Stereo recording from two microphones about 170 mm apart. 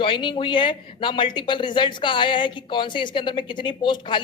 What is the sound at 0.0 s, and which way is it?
Speech, 30° left (ahead or behind).